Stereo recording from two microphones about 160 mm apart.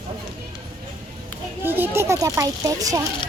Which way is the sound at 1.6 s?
10° right (ahead or behind).